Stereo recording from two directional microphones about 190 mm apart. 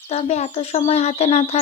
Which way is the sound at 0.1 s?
35° left (ahead or behind).